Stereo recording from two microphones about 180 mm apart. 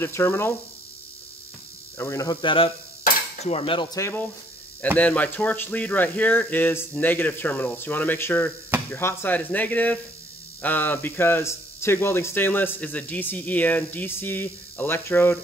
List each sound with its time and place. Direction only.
0.0 s speech: 15° left (ahead or behind)
2.0 s speech: 15° left (ahead or behind)
3.0 s cutlery: 35° left (ahead or behind); by 4.3 s 15° left (ahead or behind)
4.9 s speech: 10° left (ahead or behind)